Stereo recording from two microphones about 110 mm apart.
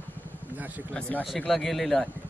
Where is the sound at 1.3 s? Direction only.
Centre (ahead or behind).